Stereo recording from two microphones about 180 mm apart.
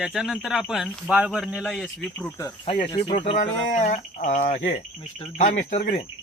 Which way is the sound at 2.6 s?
30° left (ahead or behind).